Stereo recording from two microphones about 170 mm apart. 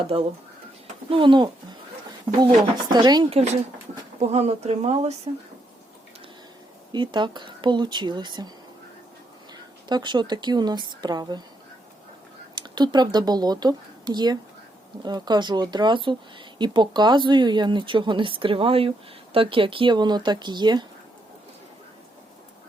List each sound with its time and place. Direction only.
0.0 s speech: 35° right (ahead or behind)
2.9 s speech: 25° right (ahead or behind)
3.2 s speech: 40° right (ahead or behind)
6.9 s speech: 25° right (ahead or behind)
9.5 s speech: 25° right (ahead or behind)
12.5 s speech: 25° right (ahead or behind)